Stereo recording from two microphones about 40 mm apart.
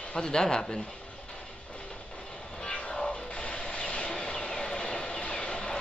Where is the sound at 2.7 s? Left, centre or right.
Left.